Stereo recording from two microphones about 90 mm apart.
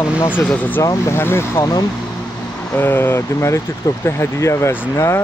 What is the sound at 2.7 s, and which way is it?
Speech, 25° left (ahead or behind).